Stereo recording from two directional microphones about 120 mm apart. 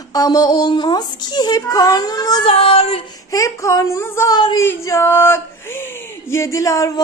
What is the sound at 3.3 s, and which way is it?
Speech, 25° left (ahead or behind).